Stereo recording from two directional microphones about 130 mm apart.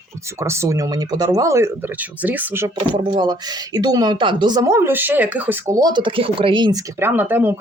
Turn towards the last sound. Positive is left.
turn(degrees=-15)  # may be behind; listen again after turning